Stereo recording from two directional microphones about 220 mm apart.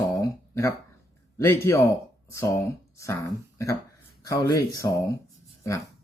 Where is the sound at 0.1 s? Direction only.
15° left (ahead or behind).